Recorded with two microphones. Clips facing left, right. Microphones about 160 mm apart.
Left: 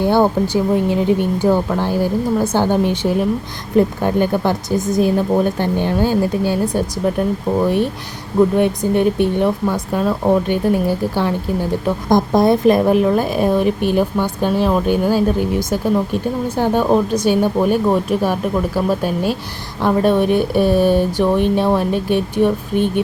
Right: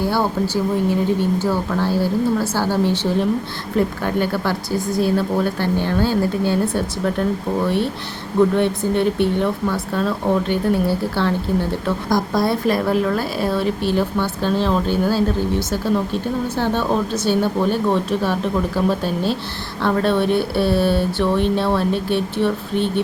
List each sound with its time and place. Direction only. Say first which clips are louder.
0.0 s speech: left 5 dB; 20° left (ahead or behind)
8.4 s speech: left 2 dB; 15° left (ahead or behind)